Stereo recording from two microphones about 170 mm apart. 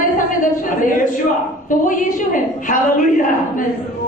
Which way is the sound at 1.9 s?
50° left (ahead or behind).